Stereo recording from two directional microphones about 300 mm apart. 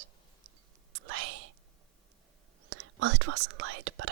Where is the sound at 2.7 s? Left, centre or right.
Right.